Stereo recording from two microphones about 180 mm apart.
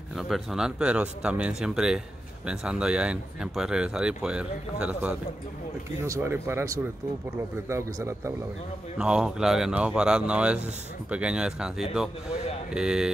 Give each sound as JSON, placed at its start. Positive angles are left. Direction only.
{"t": 0.3, "sound": "speech", "side_deg": 0}
{"t": 8.9, "sound": "speech", "side_deg": -5}